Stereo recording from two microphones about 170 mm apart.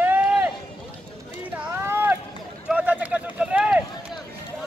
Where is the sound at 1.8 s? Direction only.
15° right (ahead or behind).